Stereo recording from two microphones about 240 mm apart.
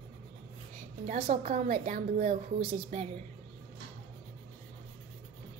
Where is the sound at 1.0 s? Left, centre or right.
Right.